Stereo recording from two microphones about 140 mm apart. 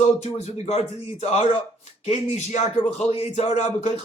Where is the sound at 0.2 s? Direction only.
55° left (ahead or behind).